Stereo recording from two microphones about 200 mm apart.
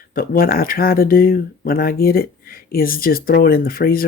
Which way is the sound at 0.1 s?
45° left (ahead or behind).